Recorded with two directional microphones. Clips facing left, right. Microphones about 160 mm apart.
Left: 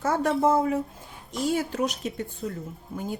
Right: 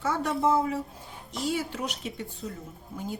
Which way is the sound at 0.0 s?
45° left (ahead or behind).